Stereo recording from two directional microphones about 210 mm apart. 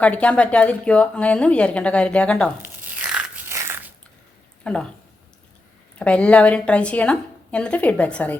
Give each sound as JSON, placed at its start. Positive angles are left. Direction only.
{"t": 0.0, "sound": "a woman's voice", "side_deg": 5}
{"t": 2.6, "sound": "a sound", "side_deg": -10}
{"t": 4.6, "sound": "speech", "side_deg": 5}
{"t": 6.0, "sound": "a woman's voice", "side_deg": 5}